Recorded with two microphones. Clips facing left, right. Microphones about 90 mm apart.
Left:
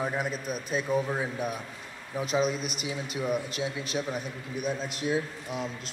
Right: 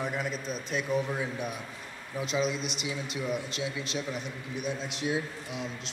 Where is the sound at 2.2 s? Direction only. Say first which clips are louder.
Left 2 dB; 45° left (ahead or behind).